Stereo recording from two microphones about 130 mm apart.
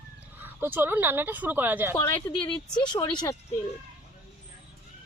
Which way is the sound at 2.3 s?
35° left (ahead or behind).